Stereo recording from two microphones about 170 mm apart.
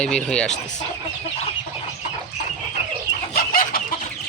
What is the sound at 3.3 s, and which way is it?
Chicken, 60° left (ahead or behind).